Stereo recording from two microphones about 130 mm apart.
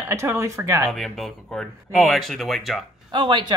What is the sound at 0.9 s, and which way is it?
Speech, centre (ahead or behind).